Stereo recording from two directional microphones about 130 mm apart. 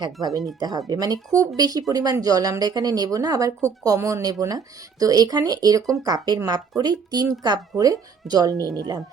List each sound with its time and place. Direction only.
0.6 s a woman's voice: 30° right (ahead or behind)